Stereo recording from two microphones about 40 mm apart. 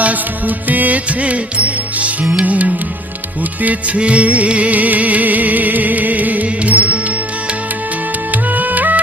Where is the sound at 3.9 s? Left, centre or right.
Right.